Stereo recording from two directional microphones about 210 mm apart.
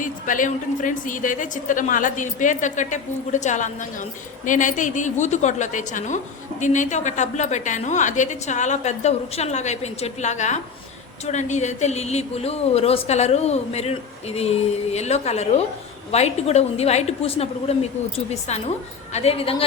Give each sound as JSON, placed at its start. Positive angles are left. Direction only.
{"t": 0.0, "sound": "a woman's voice", "side_deg": 40}